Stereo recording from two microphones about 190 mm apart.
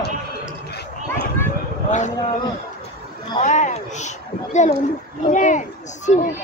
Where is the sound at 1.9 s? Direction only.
40° left (ahead or behind).